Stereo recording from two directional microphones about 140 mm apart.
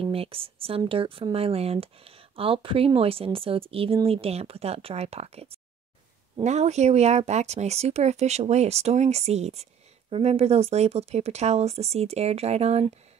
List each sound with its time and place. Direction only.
0.0 s speech: 40° right (ahead or behind)